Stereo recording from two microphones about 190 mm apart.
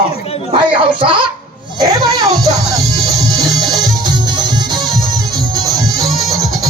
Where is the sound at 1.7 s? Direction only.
20° right (ahead or behind).